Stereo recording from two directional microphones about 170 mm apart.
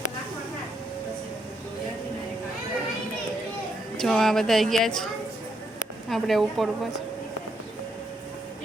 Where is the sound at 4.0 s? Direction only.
Centre (ahead or behind).